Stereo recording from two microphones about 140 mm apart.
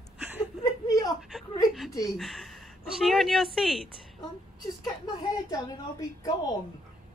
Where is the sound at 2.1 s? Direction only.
Centre (ahead or behind).